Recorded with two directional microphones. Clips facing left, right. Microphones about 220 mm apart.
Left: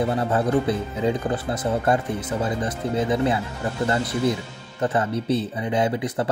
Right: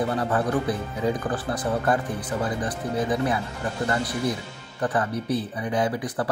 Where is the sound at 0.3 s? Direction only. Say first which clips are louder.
Left 3 dB; 25° left (ahead or behind).